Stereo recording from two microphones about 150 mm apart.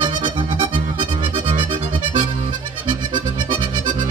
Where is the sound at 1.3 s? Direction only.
55° right (ahead or behind).